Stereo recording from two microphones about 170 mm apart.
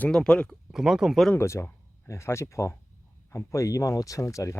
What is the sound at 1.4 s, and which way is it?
Speech, 15° left (ahead or behind).